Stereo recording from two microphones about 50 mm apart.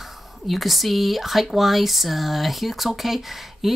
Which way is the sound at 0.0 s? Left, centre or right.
Centre.